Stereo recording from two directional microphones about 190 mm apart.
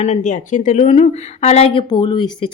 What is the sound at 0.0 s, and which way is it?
Speech, 40° left (ahead or behind).